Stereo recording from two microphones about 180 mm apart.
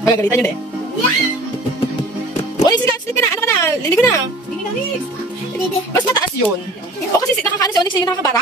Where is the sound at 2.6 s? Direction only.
20° left (ahead or behind).